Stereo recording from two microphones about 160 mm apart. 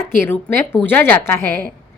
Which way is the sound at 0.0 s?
15° left (ahead or behind).